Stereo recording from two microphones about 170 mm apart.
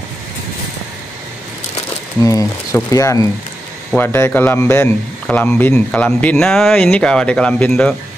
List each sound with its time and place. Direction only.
2.2 s a man's voice: 20° left (ahead or behind)